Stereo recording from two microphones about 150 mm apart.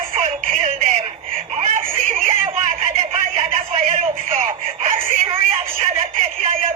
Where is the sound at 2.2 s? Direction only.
50° right (ahead or behind).